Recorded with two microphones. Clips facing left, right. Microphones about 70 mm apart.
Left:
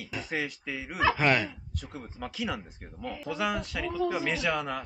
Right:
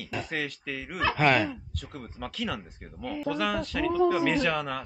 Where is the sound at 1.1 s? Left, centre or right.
Centre.